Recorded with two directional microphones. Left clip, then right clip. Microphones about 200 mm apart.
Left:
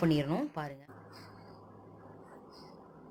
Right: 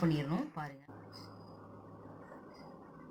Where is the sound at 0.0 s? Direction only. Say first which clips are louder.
Left 5 dB; 45° left (ahead or behind).